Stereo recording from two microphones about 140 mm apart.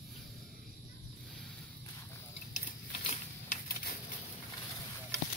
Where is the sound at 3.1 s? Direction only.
70° left (ahead or behind).